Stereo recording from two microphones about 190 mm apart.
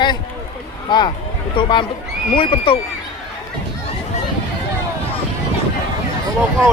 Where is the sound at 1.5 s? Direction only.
25° left (ahead or behind).